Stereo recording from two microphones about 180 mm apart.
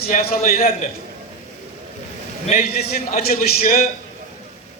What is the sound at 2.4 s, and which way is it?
A man's voice, 55° left (ahead or behind).